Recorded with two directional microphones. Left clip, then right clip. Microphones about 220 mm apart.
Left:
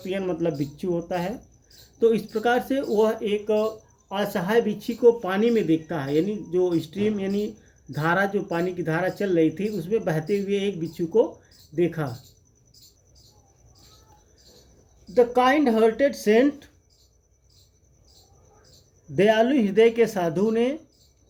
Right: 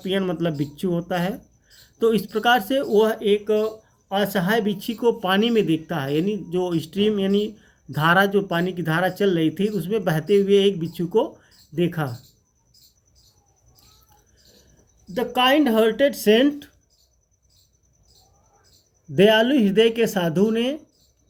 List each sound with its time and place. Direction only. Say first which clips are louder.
0.1 s speech: right 2 dB; 45° right (ahead or behind)
15.3 s speech: right 2 dB; 40° right (ahead or behind)
19.2 s speech: right 3 dB; 40° right (ahead or behind)